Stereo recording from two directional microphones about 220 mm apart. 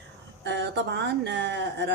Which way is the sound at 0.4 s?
50° right (ahead or behind).